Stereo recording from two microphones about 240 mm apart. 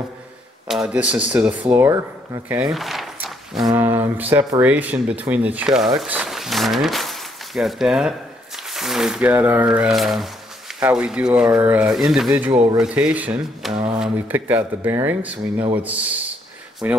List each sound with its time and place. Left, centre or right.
0.7 s speech: centre
12.4 s speech: centre
12.8 s speech: centre